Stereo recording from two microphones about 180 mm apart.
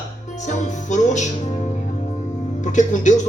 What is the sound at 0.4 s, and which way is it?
Speech, 40° left (ahead or behind).